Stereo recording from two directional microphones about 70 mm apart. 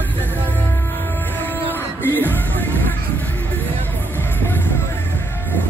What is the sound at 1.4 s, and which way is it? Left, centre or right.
Music, left.